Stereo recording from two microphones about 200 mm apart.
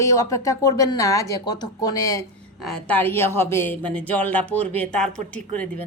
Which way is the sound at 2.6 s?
5° left (ahead or behind).